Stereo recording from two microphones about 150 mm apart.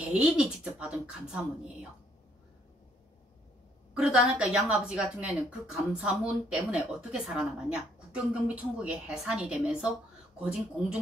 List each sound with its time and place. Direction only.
0.1 s speech: 5° right (ahead or behind)
3.9 s a woman's voice: 5° right (ahead or behind)